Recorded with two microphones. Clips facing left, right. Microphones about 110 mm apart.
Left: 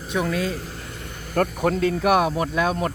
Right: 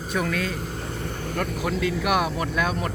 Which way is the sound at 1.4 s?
40° left (ahead or behind).